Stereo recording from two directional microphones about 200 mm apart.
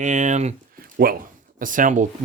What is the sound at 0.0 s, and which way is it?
Speech, 35° right (ahead or behind).